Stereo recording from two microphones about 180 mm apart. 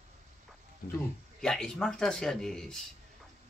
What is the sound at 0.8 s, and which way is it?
Speech, 55° left (ahead or behind).